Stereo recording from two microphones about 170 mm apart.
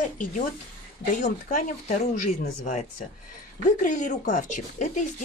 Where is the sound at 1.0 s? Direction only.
50° left (ahead or behind).